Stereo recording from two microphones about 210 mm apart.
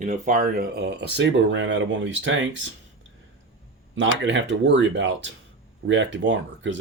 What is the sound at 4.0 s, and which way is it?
Speech, 60° right (ahead or behind).